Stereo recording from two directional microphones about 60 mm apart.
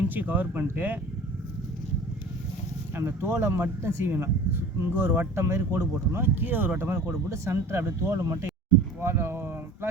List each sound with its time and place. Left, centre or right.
0.1 s speech: right
2.9 s speech: right
6.9 s speech: right